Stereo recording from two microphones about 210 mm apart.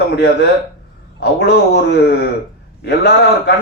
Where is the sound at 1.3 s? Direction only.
55° left (ahead or behind).